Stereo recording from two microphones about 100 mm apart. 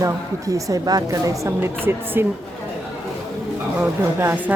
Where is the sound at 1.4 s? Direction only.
25° right (ahead or behind).